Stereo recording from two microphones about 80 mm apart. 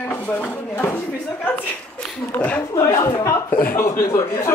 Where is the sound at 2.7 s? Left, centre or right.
Left.